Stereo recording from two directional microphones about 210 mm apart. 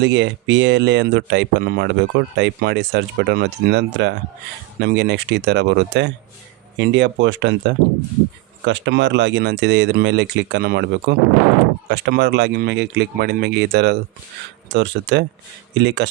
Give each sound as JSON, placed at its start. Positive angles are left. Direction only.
{"t": 0.0, "sound": "speech", "side_deg": -60}